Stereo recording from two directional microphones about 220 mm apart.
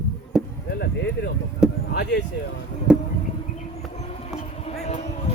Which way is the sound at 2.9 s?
5° right (ahead or behind).